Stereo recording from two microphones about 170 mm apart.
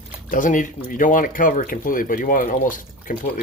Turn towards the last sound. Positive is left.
turn(degrees=55)  # may be behind; listen again after turning